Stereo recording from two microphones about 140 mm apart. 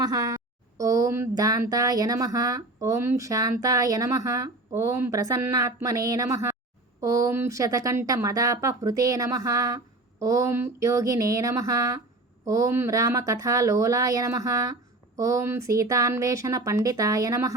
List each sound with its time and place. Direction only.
0.0 s speech: 25° right (ahead or behind)